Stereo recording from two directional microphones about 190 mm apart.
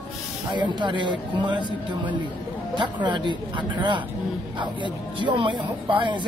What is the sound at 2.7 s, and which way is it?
Speech, 25° right (ahead or behind).